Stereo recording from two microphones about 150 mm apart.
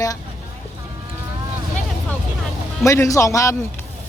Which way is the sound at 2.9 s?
20° left (ahead or behind).